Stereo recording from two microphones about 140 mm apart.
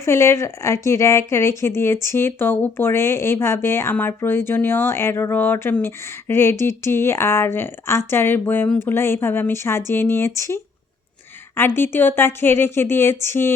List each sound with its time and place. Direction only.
0.0 s a woman's voice: 20° left (ahead or behind)